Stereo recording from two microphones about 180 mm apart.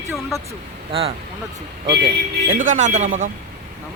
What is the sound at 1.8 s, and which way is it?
Speech, 65° right (ahead or behind).